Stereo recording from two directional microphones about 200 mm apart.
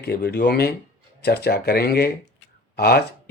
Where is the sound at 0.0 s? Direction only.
55° left (ahead or behind).